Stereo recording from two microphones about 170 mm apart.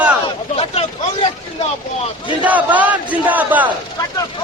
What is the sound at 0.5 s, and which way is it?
Speech, 35° left (ahead or behind).